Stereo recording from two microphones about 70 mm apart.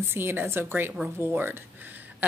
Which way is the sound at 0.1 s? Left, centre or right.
Right.